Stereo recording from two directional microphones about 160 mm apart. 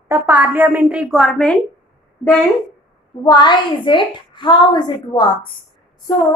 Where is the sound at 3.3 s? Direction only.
25° left (ahead or behind).